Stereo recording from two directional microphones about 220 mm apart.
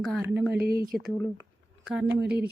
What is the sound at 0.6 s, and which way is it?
Speech, 45° right (ahead or behind).